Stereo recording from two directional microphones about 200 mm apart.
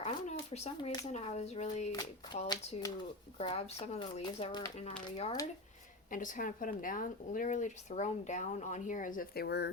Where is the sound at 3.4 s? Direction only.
30° left (ahead or behind).